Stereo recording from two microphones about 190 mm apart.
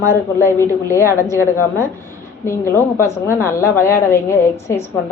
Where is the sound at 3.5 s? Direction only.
15° left (ahead or behind).